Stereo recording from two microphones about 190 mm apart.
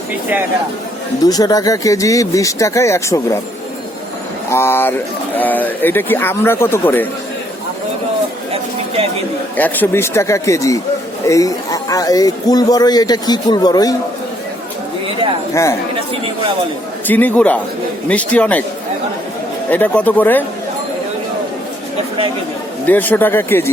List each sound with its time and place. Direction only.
1.2 s speech: 20° left (ahead or behind)
4.4 s speech: 15° left (ahead or behind)
9.6 s a man's voice: 10° left (ahead or behind)
17.1 s speech: 10° left (ahead or behind)
19.7 s speech: 5° left (ahead or behind)
22.9 s speech: 10° left (ahead or behind)